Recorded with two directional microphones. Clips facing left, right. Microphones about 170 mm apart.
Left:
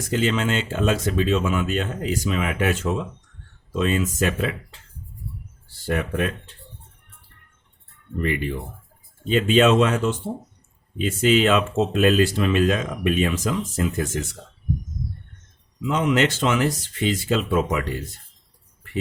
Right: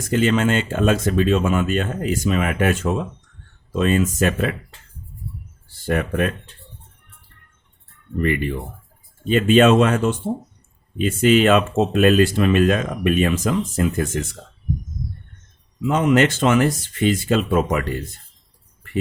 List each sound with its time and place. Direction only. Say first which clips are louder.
0.1 s speech: right 4 dB; 50° right (ahead or behind)
5.8 s speech: right 3 dB; 55° right (ahead or behind)
8.2 s speech: right 4 dB; 55° right (ahead or behind)
15.8 s speech: right 4 dB; 50° right (ahead or behind)